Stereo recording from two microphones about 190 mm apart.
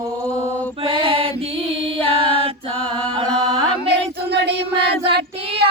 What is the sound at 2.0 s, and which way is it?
Female singing, 30° right (ahead or behind).